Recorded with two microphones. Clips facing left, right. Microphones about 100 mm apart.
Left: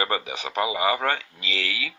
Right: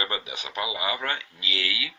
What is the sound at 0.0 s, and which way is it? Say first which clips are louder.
Speech: left 5 dB; 40° left (ahead or behind).